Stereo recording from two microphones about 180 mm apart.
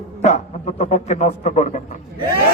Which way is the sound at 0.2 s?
40° left (ahead or behind).